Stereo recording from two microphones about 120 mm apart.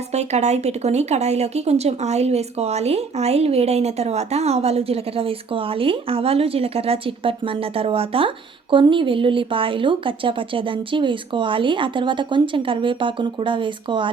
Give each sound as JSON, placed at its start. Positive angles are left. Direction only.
{"t": 0.1, "sound": "a woman's voice", "side_deg": -65}